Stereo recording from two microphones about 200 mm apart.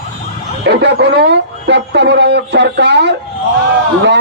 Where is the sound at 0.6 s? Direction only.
60° right (ahead or behind).